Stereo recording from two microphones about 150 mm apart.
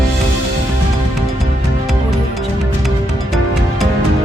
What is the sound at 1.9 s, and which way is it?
Music, centre (ahead or behind).